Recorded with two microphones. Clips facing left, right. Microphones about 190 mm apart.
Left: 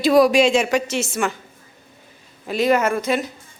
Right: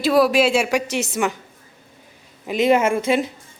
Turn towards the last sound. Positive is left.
turn(degrees=-25)  # may be behind; listen again after turning